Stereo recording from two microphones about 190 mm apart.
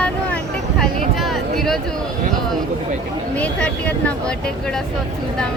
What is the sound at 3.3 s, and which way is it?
Speech, 5° left (ahead or behind).